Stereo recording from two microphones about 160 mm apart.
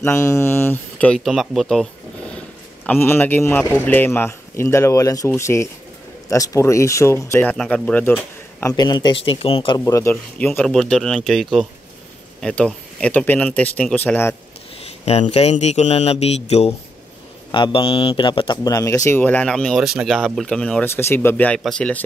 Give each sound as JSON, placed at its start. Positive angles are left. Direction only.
{"t": 0.0, "sound": "speech", "side_deg": 15}
{"t": 8.7, "sound": "speech", "side_deg": 25}
{"t": 9.8, "sound": "speech", "side_deg": 15}
{"t": 10.4, "sound": "speech", "side_deg": 5}
{"t": 15.0, "sound": "speech", "side_deg": 40}
{"t": 20.9, "sound": "speech", "side_deg": 15}